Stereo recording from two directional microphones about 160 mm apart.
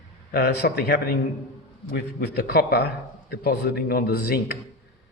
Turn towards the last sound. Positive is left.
turn(degrees=80)